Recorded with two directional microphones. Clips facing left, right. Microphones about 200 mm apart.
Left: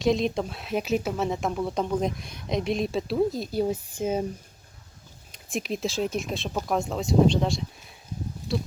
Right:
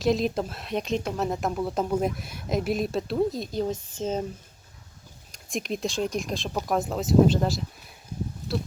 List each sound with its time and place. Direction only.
0.0 s speech: centre (ahead or behind)
5.3 s speech: centre (ahead or behind)